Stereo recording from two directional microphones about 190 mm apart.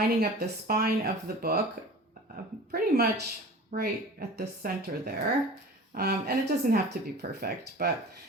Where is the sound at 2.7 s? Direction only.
55° right (ahead or behind).